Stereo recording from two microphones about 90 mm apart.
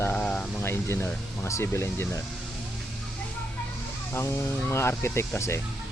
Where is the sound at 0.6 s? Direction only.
25° left (ahead or behind).